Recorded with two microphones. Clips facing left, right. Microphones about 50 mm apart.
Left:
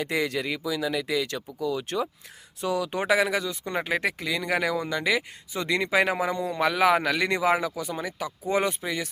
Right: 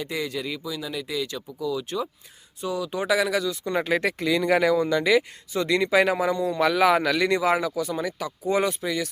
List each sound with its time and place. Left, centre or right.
0.0 s speech: left
1.6 s speech: left
3.2 s speech: left